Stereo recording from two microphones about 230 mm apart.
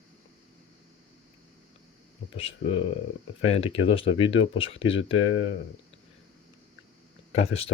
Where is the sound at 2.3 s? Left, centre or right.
Left.